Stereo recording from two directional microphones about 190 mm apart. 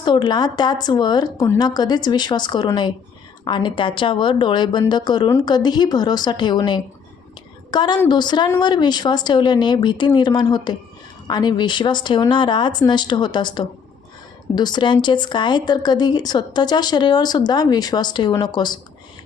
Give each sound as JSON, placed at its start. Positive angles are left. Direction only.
{"t": 0.0, "sound": "a woman's voice", "side_deg": 25}